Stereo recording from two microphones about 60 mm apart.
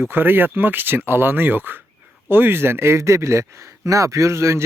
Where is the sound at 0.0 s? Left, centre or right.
Right.